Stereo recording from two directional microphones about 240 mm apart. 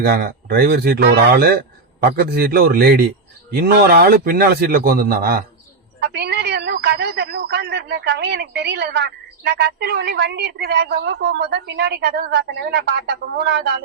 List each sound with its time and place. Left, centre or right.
0.0 s a man's voice: right